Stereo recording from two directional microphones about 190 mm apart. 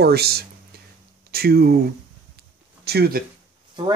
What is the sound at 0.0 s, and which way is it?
Speech, 55° right (ahead or behind).